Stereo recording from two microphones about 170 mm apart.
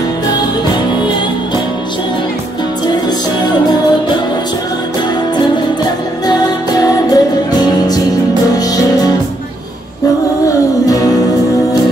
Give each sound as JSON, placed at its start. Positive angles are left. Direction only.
{"t": 6.2, "sound": "music", "side_deg": 25}
{"t": 10.4, "sound": "music", "side_deg": 20}